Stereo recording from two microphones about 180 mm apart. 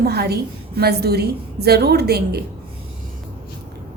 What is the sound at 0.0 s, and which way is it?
A woman's voice, 60° right (ahead or behind).